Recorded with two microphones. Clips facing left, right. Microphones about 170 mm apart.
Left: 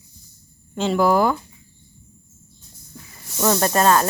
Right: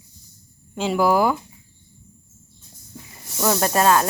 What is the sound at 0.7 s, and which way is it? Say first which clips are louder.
Speech: left 1 dB; 10° right (ahead or behind).